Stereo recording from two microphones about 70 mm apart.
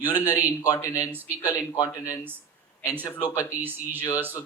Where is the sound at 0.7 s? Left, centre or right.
Left.